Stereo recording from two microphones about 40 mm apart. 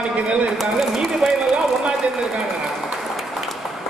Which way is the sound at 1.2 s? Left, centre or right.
Right.